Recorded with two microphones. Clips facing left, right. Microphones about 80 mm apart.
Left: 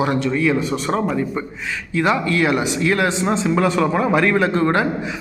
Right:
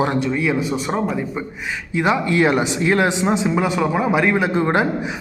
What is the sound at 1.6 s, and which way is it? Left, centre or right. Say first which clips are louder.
A man's voice: even; right.